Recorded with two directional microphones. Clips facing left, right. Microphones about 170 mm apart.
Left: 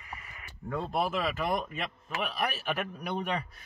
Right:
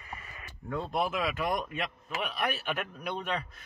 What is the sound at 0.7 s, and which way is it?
Speech, 10° left (ahead or behind).